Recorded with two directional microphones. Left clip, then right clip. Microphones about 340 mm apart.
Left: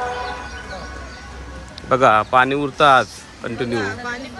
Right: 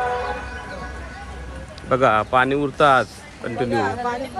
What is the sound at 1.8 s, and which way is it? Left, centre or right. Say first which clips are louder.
Speech: left 3 dB; centre.